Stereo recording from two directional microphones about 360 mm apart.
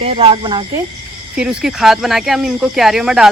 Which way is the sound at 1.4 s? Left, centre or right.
Centre.